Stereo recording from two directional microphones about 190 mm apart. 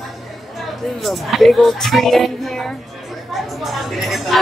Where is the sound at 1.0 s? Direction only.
Centre (ahead or behind).